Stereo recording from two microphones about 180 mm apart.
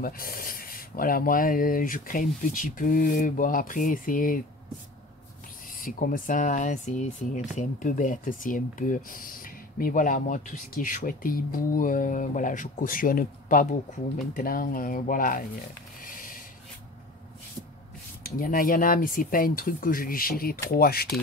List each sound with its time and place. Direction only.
0.0 s speech: 55° left (ahead or behind)
5.8 s speech: 50° left (ahead or behind)
16.0 s a sound: 50° left (ahead or behind)
18.2 s speech: 50° left (ahead or behind)